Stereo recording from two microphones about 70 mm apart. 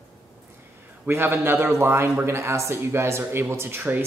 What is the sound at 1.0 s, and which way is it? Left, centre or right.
A man's voice, right.